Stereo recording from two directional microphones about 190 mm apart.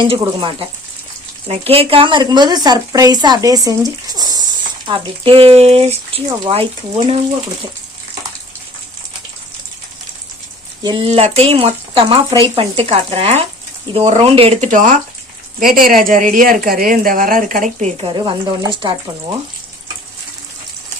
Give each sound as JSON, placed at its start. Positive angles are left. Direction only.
{"t": 0.0, "sound": "a woman's voice", "side_deg": -25}
{"t": 10.8, "sound": "a woman's voice", "side_deg": -30}